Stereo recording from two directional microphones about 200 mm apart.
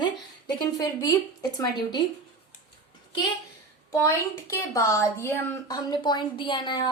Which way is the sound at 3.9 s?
15° left (ahead or behind).